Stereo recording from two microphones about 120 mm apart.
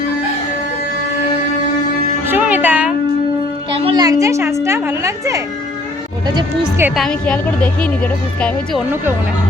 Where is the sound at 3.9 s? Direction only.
30° right (ahead or behind).